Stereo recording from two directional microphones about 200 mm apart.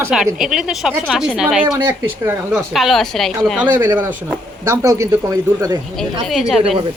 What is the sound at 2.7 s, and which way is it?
Speech, centre (ahead or behind).